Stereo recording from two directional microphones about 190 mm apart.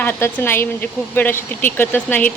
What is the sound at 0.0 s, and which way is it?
Speech, 10° left (ahead or behind).